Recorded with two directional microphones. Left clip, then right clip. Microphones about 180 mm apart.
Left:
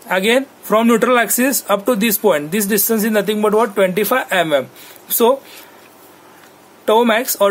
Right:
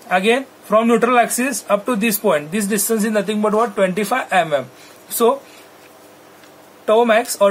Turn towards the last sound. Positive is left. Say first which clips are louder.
# even
turn(degrees=55)  # may be behind; listen again after turning